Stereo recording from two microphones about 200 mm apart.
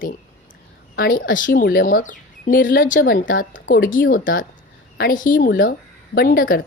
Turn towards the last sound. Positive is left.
turn(degrees=45)  # may be behind; listen again after turning